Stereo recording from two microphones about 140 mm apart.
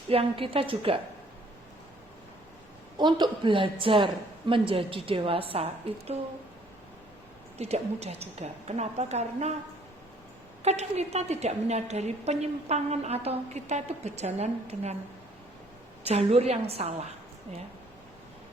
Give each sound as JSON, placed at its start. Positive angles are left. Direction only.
{"t": 0.1, "sound": "a woman's voice", "side_deg": -40}
{"t": 3.0, "sound": "a woman's voice", "side_deg": -35}
{"t": 7.6, "sound": "a woman's voice", "side_deg": -50}
{"t": 10.6, "sound": "a woman's voice", "side_deg": -50}
{"t": 16.0, "sound": "a woman's voice", "side_deg": -50}